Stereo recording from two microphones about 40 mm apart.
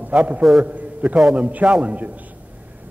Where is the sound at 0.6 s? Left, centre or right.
Right.